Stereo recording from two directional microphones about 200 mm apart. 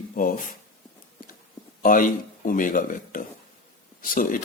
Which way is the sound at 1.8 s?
45° left (ahead or behind).